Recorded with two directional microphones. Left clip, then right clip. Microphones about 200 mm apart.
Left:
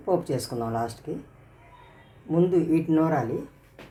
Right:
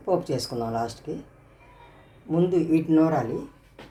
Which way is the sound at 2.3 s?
Centre (ahead or behind).